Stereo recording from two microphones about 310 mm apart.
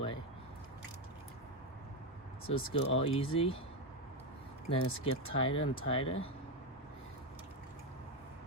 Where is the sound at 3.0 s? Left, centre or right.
Centre.